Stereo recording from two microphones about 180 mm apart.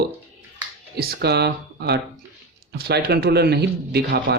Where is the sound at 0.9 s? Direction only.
60° right (ahead or behind).